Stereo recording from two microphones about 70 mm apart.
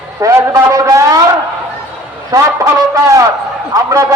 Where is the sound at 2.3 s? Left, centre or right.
Right.